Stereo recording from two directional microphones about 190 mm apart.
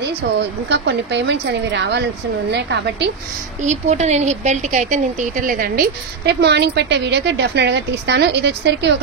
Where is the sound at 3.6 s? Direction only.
35° right (ahead or behind).